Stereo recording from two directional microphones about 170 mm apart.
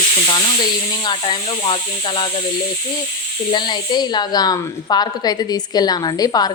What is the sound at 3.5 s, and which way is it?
A woman's voice, 25° left (ahead or behind).